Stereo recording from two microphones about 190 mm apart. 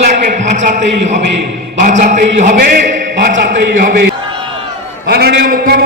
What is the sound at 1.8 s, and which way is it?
A man's voice, 40° right (ahead or behind).